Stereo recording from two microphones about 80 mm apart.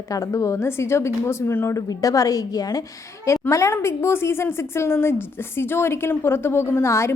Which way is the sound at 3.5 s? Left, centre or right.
Left.